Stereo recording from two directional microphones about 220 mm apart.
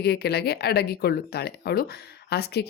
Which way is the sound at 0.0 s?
45° left (ahead or behind).